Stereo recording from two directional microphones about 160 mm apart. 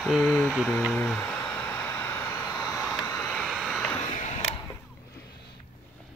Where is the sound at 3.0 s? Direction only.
15° left (ahead or behind).